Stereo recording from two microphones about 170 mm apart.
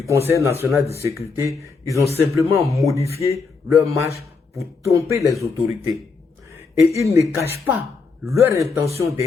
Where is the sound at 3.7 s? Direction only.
20° right (ahead or behind).